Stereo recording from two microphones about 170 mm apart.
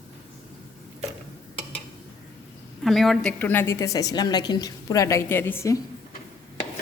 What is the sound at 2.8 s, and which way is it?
A woman's voice, centre (ahead or behind).